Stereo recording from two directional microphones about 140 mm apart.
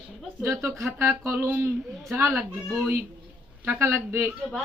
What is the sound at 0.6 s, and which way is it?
Speech, 20° right (ahead or behind).